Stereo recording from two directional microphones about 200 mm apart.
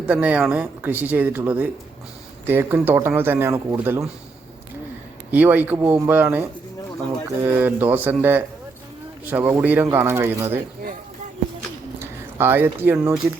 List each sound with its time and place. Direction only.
0.0 s speech: 5° right (ahead or behind)
5.3 s speech: 10° right (ahead or behind)
7.4 s speech: 10° right (ahead or behind)
11.9 s speech: 10° right (ahead or behind)